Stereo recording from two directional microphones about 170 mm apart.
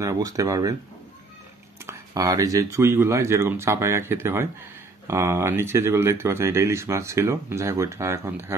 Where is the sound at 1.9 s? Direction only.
20° right (ahead or behind).